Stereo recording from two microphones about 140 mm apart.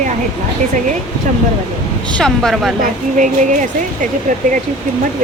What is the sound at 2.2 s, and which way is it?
Speech, centre (ahead or behind).